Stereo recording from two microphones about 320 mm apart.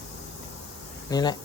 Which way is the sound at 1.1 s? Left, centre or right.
Centre.